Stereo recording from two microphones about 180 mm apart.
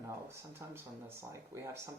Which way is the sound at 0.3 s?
15° right (ahead or behind).